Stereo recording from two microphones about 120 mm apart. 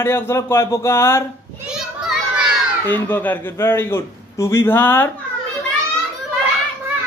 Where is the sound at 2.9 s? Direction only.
15° left (ahead or behind).